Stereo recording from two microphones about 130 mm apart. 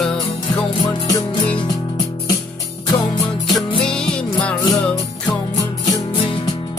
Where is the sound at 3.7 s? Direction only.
40° left (ahead or behind).